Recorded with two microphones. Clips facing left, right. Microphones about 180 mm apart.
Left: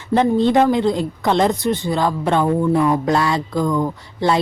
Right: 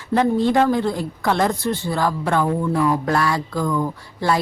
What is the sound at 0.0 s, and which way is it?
A woman's voice, 20° left (ahead or behind).